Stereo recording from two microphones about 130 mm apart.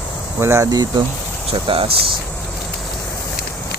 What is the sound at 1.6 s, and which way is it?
Speech, 45° right (ahead or behind).